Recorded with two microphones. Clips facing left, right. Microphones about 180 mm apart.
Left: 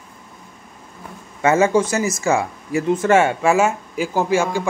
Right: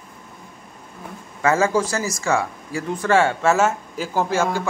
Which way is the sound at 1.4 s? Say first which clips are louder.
Left 3 dB; 20° left (ahead or behind).